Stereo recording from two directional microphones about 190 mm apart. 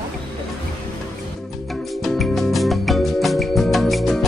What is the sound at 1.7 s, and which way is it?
Music, centre (ahead or behind).